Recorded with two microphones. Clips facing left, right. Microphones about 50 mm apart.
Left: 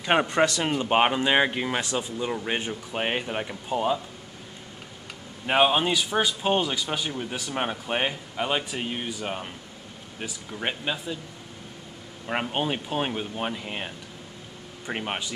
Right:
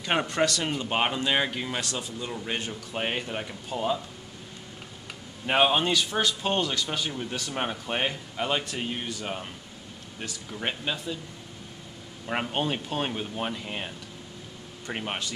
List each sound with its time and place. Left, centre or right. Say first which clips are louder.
0.0 s speech: left 4 dB; centre
5.5 s speech: left 1 dB; centre
12.3 s speech: left 1 dB; centre